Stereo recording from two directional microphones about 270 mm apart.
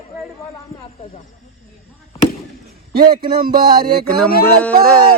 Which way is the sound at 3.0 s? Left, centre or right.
Centre.